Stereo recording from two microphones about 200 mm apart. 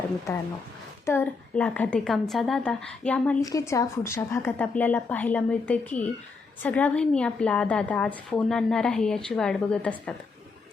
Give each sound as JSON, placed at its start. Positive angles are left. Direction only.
{"t": 0.3, "sound": "a woman's voice", "side_deg": 15}
{"t": 3.4, "sound": "a woman's voice", "side_deg": 15}